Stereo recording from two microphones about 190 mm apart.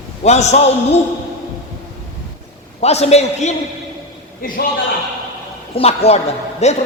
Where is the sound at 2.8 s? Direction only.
35° left (ahead or behind).